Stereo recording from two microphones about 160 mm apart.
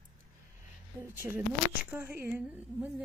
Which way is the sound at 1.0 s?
15° right (ahead or behind).